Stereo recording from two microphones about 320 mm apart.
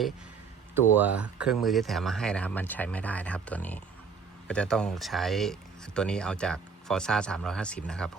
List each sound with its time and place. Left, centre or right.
0.9 s speech: centre